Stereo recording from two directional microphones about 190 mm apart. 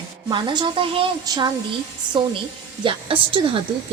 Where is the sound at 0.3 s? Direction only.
25° right (ahead or behind).